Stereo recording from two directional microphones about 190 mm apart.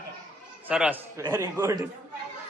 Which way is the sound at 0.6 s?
5° right (ahead or behind).